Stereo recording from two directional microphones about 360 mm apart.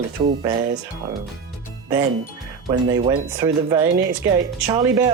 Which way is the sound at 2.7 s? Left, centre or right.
Centre.